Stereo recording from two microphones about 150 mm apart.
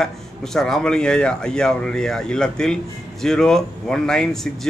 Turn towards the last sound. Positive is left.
turn(degrees=5)  # may be behind; listen again after turning